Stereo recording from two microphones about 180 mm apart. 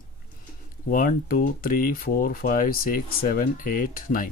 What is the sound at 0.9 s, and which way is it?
Speech, 50° left (ahead or behind).